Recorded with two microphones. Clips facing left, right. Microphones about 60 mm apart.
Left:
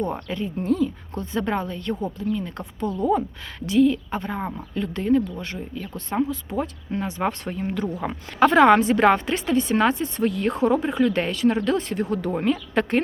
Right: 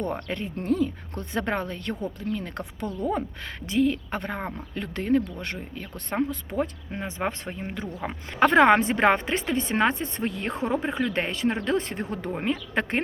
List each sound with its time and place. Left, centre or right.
0.1 s speech: right
3.7 s speech: right
4.1 s speech: right
5.5 s speech: right
6.1 s speech: right
6.6 s speech: right
8.4 s speech: right